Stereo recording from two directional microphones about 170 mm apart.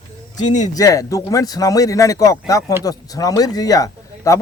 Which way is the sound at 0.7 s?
20° left (ahead or behind).